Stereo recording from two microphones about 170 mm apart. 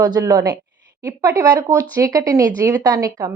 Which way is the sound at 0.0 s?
25° right (ahead or behind).